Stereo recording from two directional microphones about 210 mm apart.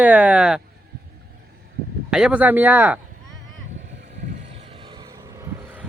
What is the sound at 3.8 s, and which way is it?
Vehicle, 35° right (ahead or behind).